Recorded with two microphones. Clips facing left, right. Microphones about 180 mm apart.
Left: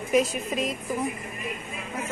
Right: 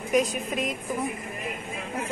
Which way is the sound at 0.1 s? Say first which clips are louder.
Left 1 dB; centre (ahead or behind).